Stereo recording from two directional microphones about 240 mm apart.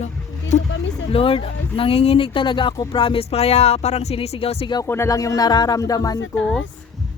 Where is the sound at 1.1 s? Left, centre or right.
Left.